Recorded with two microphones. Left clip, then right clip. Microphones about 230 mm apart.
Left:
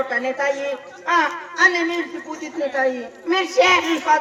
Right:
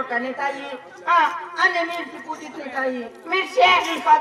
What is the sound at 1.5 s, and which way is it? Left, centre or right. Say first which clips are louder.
Speech: left 4 dB; left.